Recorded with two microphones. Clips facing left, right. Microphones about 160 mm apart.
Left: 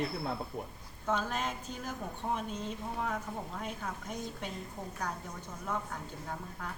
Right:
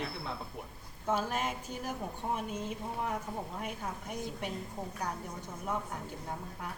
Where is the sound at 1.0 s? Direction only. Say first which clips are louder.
Right 1 dB; 10° right (ahead or behind).